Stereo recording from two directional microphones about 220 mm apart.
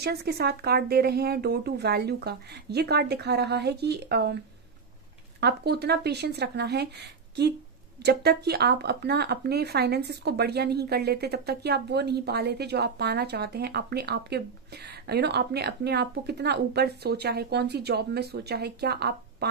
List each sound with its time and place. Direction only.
0.0 s speech: 45° right (ahead or behind)
5.4 s speech: 50° right (ahead or behind)